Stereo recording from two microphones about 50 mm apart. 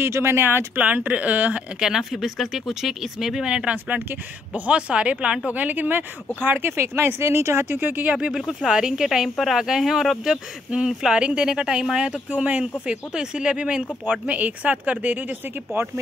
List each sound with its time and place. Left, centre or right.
0.0 s speech: right
0.7 s speech: right
1.8 s speech: centre
3.7 s speech: right
4.7 s speech: right
5.5 s speech: right
6.8 s speech: right
7.8 s speech: right
8.3 s speech: centre
11.1 s speech: centre
12.3 s speech: right